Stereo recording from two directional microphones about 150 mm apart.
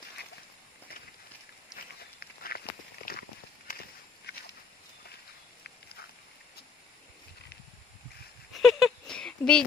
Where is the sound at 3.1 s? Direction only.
75° left (ahead or behind).